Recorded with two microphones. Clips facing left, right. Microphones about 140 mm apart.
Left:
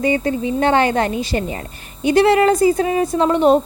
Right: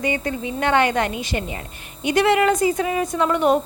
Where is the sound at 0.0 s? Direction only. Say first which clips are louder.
Left 6 dB; 35° left (ahead or behind).